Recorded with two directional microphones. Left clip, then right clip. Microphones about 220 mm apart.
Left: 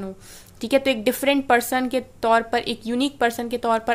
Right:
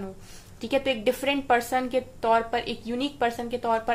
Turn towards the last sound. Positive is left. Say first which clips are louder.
# left 4 dB
turn(degrees=45)  # may be behind; listen again after turning